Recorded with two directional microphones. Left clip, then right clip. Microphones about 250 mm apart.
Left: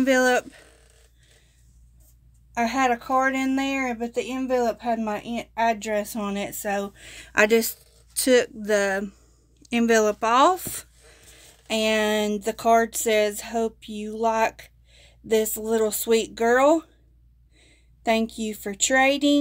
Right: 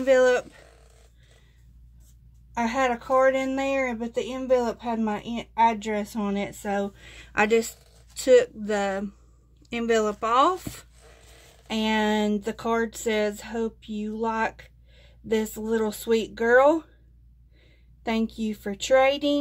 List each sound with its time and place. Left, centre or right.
0.0 s speech: left
2.5 s a woman's voice: left